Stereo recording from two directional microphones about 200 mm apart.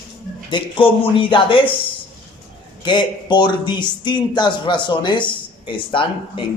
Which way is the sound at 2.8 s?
20° left (ahead or behind).